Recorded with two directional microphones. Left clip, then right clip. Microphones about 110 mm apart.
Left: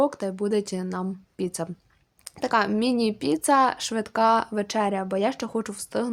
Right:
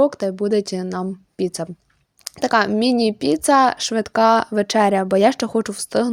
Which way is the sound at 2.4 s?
50° right (ahead or behind).